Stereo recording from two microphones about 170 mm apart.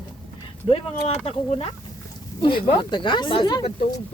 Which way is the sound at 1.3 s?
35° left (ahead or behind).